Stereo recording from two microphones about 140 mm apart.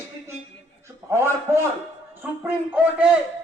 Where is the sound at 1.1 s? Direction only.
20° right (ahead or behind).